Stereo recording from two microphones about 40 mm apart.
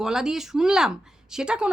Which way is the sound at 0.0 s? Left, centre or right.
Centre.